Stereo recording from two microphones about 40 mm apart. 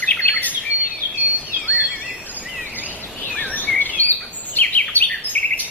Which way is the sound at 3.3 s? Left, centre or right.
Left.